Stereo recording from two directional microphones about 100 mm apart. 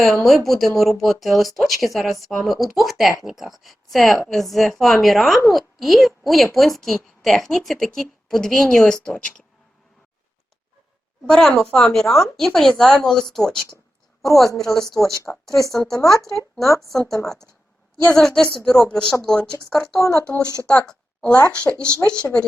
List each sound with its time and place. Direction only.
0.0 s a woman's voice: centre (ahead or behind)
11.3 s a woman's voice: 5° left (ahead or behind)
17.2 s a woman's voice: 5° left (ahead or behind)
20.0 s speech: 30° left (ahead or behind)
20.7 s a woman's voice: 10° left (ahead or behind)